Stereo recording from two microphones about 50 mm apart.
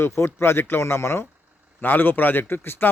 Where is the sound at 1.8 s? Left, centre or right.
Left.